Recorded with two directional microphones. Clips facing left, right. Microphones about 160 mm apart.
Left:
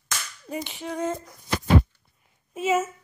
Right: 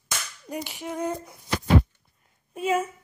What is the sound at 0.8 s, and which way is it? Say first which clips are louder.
Speech: left 1 dB; 15° right (ahead or behind).